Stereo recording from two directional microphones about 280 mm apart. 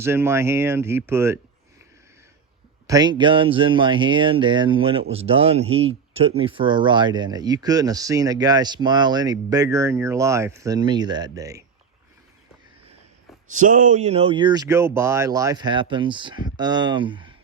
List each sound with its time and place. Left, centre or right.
0.0 s speech: centre
2.8 s speech: centre
13.5 s speech: right